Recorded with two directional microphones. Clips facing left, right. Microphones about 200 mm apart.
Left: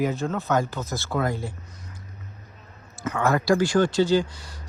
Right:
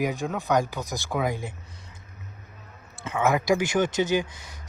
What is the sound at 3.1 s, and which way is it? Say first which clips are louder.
Speech: left 1 dB; 20° right (ahead or behind).